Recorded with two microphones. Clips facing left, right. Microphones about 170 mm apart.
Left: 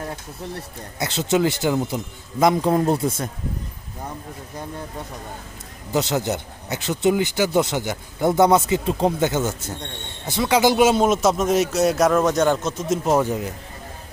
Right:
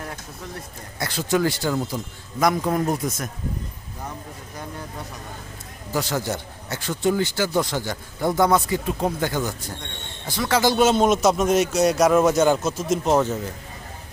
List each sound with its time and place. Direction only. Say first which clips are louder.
0.9 s speech: left 2 dB; 20° left (ahead or behind)
5.9 s speech: left 3 dB; 20° left (ahead or behind)